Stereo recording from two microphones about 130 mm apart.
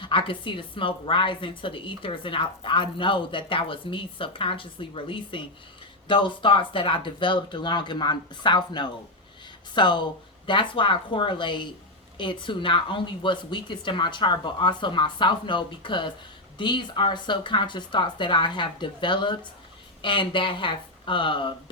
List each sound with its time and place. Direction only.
0.0 s a woman's voice: 40° left (ahead or behind)